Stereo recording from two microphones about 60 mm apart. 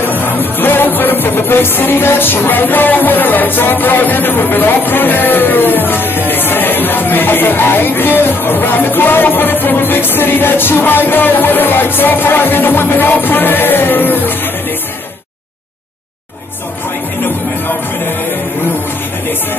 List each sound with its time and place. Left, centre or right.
0.0 s music: left